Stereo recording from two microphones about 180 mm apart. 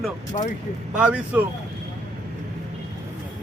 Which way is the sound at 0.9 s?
5° right (ahead or behind).